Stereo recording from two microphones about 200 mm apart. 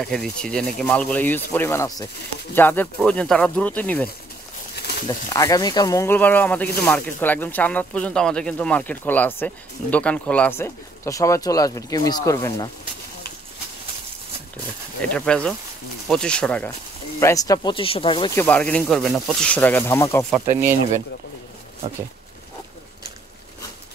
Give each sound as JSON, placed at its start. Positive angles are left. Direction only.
{"t": 0.0, "sound": "speech", "side_deg": 5}
{"t": 15.1, "sound": "speech", "side_deg": 5}
{"t": 17.2, "sound": "speech", "side_deg": 15}
{"t": 18.3, "sound": "speech", "side_deg": 10}
{"t": 20.4, "sound": "speech", "side_deg": -15}